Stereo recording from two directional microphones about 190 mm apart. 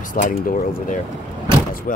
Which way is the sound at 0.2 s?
45° left (ahead or behind).